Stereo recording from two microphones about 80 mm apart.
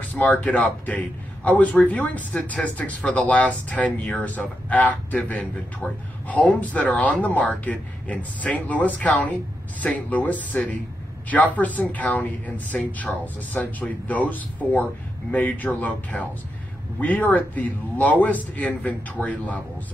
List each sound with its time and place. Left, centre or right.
0.1 s a man's voice: centre